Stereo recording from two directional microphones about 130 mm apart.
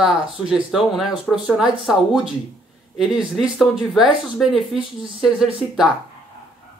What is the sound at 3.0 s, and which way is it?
A woman's voice, 5° right (ahead or behind).